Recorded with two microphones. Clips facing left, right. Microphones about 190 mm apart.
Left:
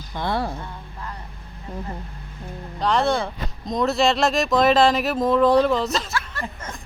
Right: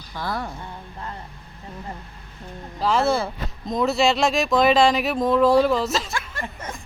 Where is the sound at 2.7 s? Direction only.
5° right (ahead or behind).